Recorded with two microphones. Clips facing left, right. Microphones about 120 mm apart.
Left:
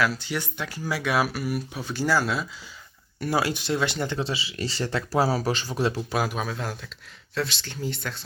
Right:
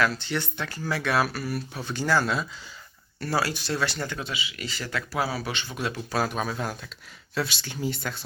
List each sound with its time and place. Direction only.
0.0 s speech: 5° left (ahead or behind)
3.2 s speech: 20° left (ahead or behind)
6.1 s speech: 15° left (ahead or behind)
6.3 s speech: centre (ahead or behind)